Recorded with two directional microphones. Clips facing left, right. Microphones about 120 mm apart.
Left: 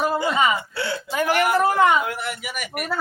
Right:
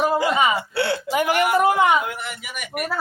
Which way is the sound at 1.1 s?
15° right (ahead or behind).